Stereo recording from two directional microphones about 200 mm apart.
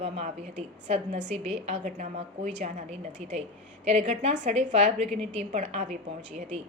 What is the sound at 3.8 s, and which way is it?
Speech, 35° right (ahead or behind).